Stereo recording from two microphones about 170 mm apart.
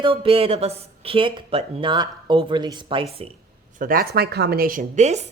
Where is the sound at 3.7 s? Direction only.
55° right (ahead or behind).